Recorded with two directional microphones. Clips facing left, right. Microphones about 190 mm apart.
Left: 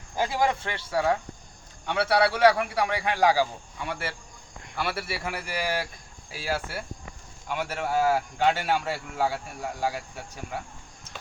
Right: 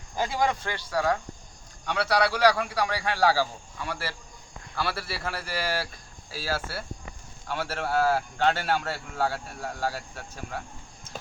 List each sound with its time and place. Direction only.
0.2 s speech: 5° left (ahead or behind)
0.6 s a man's voice: 25° left (ahead or behind)